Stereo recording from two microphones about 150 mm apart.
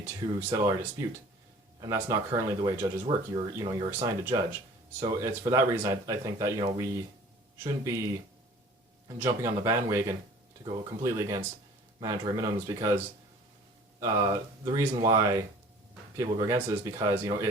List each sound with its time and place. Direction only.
0.0 s speech: 15° right (ahead or behind)
9.2 s speech: 20° right (ahead or behind)
14.0 s speech: 25° right (ahead or behind)